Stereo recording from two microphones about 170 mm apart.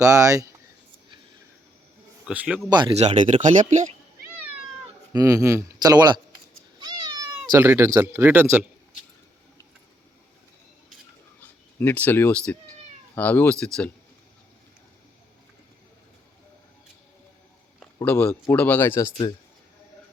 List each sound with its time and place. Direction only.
0.0 s speech: 20° right (ahead or behind)
2.2 s speech: 5° right (ahead or behind)
2.6 s speech: 25° right (ahead or behind)
3.0 s speech: 40° right (ahead or behind)
5.1 s speech: 20° right (ahead or behind)
6.7 s cat: 25° right (ahead or behind)
7.6 s speech: 15° right (ahead or behind)
11.3 s speech: 10° left (ahead or behind)
18.0 s speech: 10° left (ahead or behind)